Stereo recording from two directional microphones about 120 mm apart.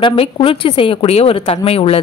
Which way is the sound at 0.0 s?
50° left (ahead or behind).